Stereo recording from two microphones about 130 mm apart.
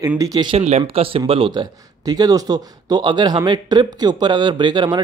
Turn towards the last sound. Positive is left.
turn(degrees=-35)  # may be behind; listen again after turning